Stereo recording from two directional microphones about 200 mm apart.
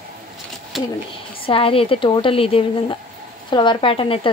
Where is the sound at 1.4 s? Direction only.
25° left (ahead or behind).